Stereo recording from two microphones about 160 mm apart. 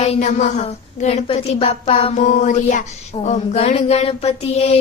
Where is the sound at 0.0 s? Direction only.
45° left (ahead or behind).